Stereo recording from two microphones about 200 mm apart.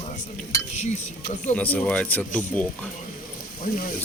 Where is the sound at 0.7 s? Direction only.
35° left (ahead or behind).